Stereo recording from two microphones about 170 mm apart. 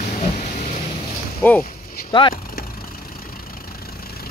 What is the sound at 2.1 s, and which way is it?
Speech, 25° left (ahead or behind).